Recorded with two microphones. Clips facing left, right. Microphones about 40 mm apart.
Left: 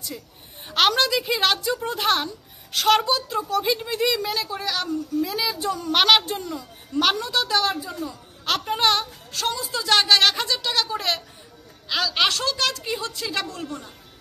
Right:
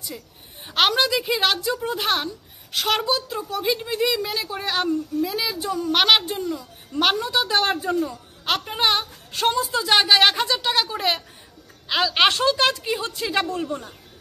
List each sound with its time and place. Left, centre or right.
0.7 s speech: centre
4.5 s speech: right
5.2 s speech: centre
7.0 s a woman's voice: centre
7.5 s a woman's voice: right
8.0 s a child's voice: centre
9.3 s a woman's voice: right
9.8 s a woman's voice: centre
11.9 s speech: right